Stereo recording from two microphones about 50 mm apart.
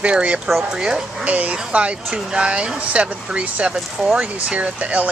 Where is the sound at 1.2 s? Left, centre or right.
Right.